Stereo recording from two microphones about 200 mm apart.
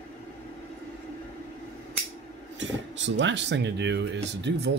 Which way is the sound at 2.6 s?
65° right (ahead or behind).